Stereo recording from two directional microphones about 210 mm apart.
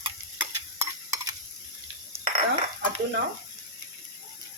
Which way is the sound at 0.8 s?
15° right (ahead or behind).